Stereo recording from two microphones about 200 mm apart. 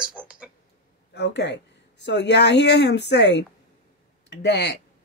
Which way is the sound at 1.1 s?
60° left (ahead or behind).